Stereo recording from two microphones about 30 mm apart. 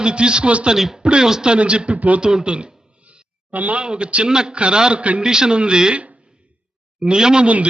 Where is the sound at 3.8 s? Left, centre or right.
Right.